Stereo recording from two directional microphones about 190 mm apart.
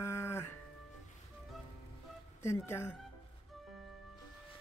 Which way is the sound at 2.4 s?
15° left (ahead or behind).